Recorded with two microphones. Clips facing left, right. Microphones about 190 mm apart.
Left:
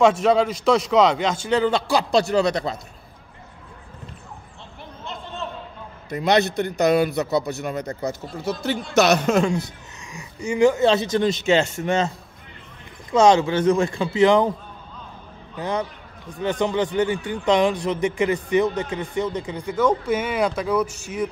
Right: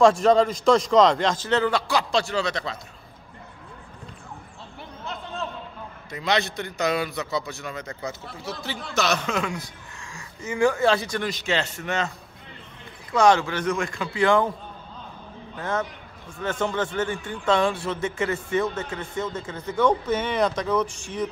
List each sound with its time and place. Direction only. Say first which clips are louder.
0.0 s a man's voice: even; 5° left (ahead or behind)
1.7 s speech: left 4 dB; 30° left (ahead or behind)
5.0 s a sound: even; centre (ahead or behind)
6.8 s a man's voice: left 7 dB; 55° left (ahead or behind)
7.7 s a man's voice: left 6 dB; 35° left (ahead or behind)
9.4 s speech: left 8 dB; 25° left (ahead or behind)
13.1 s speech: left 4 dB; 20° left (ahead or behind)
15.5 s a man's voice: left 2 dB; 15° left (ahead or behind)